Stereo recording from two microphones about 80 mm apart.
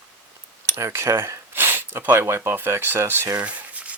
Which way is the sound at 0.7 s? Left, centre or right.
Right.